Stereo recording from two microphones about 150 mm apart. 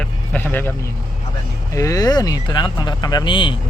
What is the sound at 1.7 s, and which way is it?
Speech, 20° left (ahead or behind).